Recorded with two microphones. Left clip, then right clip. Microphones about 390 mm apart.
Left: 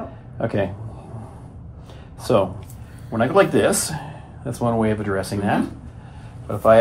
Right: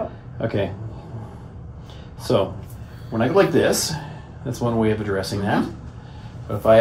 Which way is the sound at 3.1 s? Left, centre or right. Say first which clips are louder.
Left 1 dB; centre.